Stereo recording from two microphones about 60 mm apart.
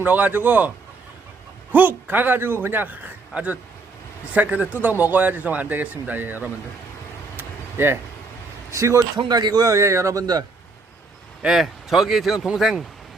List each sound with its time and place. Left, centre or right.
0.0 s a man's voice: right
1.7 s a man's voice: right
7.3 s a sound: right
8.7 s a man's voice: right
11.4 s speech: centre